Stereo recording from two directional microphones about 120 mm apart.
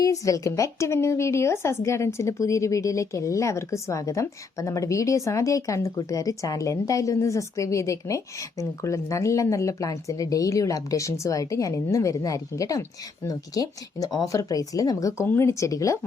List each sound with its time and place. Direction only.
0.0 s a woman's voice: 30° left (ahead or behind)